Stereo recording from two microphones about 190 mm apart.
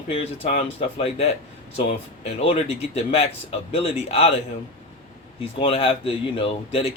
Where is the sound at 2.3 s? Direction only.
30° left (ahead or behind).